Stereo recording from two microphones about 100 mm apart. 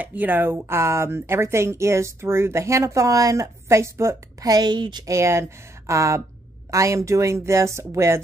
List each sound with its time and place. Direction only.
0.0 s speech: 15° right (ahead or behind); by 5.0 s 45° right (ahead or behind)
5.0 s speech: 30° right (ahead or behind)